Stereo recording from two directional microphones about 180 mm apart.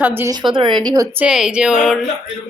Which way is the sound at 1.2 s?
5° right (ahead or behind).